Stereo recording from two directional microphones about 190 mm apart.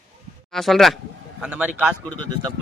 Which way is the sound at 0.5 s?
Centre (ahead or behind).